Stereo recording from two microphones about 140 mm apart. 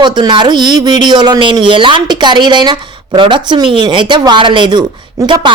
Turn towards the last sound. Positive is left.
turn(degrees=-25)  # may be behind; listen again after turning